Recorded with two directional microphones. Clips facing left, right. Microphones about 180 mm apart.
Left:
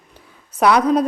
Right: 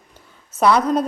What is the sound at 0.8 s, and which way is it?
Speech, 10° left (ahead or behind).